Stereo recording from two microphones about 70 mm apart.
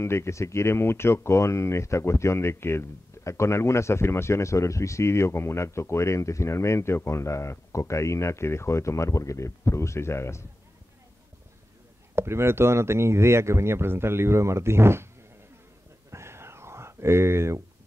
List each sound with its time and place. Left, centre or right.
0.0 s speech: left
12.2 s speech: right
16.1 s whispering: right